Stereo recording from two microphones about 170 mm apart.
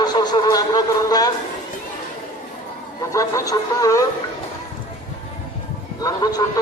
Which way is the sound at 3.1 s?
20° left (ahead or behind).